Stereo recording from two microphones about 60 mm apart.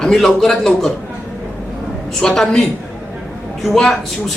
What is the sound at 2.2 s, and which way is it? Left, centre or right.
Speech, centre.